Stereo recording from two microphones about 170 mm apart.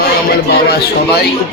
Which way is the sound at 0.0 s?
70° left (ahead or behind).